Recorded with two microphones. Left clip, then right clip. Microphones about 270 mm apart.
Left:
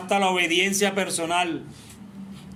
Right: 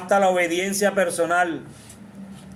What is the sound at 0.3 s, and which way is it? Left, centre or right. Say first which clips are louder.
Speech: right 1 dB; left.